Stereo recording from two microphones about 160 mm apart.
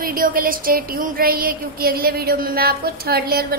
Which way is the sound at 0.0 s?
65° right (ahead or behind).